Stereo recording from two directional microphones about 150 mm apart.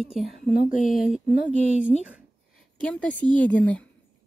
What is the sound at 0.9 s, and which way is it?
A woman's voice, 5° right (ahead or behind).